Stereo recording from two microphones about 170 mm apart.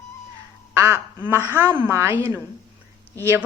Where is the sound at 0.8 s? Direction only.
15° right (ahead or behind).